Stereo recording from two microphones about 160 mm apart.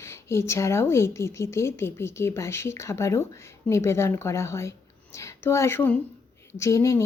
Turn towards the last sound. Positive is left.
turn(degrees=20)  # may be behind; listen again after turning